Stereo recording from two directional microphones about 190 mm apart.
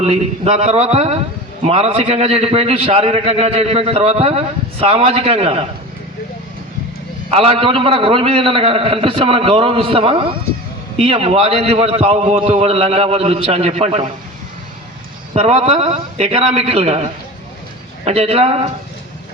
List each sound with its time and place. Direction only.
0.0 s a man's voice: 35° right (ahead or behind)
7.3 s a man's voice: 30° right (ahead or behind)
15.3 s a man's voice: 35° right (ahead or behind)